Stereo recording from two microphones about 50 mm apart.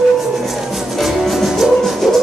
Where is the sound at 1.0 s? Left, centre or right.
Centre.